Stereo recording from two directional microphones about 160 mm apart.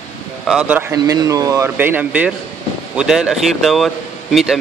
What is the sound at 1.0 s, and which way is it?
Speech, 25° right (ahead or behind).